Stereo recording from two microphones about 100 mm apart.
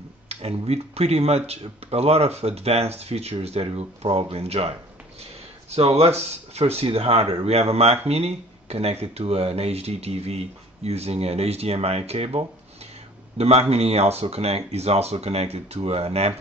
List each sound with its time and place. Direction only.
0.3 s speech: 90° right; by 12.4 s 70° right (ahead or behind)
13.4 s speech: 90° right